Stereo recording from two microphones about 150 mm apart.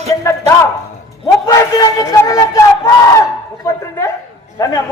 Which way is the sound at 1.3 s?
20° left (ahead or behind).